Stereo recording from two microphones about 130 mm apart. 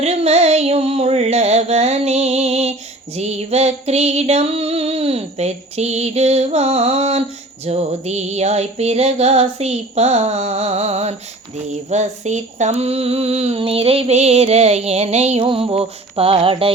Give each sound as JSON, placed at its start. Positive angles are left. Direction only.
{"t": 0.0, "sound": "female singing", "side_deg": -55}
{"t": 3.2, "sound": "music", "side_deg": -55}
{"t": 11.7, "sound": "a sound", "side_deg": -60}
{"t": 15.4, "sound": "mantra", "side_deg": -45}